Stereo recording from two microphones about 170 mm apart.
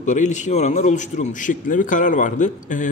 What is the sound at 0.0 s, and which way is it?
A man's voice, 45° left (ahead or behind).